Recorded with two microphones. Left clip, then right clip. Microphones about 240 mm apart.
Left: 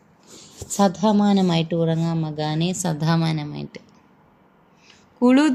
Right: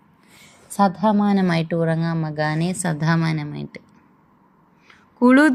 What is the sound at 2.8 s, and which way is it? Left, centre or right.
A woman's voice, centre.